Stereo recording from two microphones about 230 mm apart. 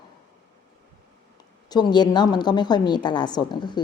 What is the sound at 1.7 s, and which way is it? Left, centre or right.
A woman's voice, centre.